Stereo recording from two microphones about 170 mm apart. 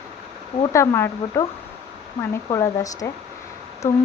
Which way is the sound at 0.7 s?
15° left (ahead or behind).